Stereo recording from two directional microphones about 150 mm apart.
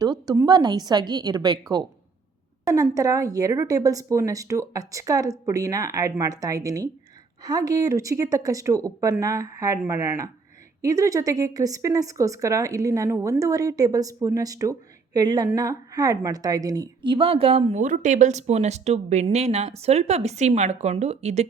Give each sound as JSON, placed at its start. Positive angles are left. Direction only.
{"t": 0.0, "sound": "a woman's voice", "side_deg": -25}
{"t": 2.6, "sound": "a woman's voice", "side_deg": -25}